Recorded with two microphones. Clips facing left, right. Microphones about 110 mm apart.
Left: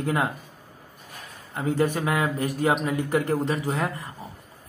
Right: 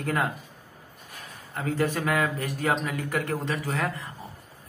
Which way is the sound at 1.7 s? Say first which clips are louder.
Left 1 dB; 15° left (ahead or behind).